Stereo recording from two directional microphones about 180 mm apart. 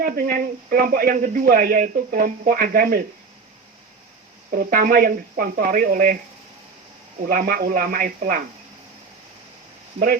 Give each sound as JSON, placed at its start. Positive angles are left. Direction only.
{"t": 0.0, "sound": "a man's voice", "side_deg": -50}
{"t": 4.5, "sound": "a man's voice", "side_deg": -55}
{"t": 7.3, "sound": "a man's voice", "side_deg": -50}